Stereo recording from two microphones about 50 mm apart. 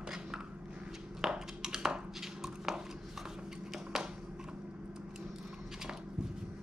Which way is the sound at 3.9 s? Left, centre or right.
Centre.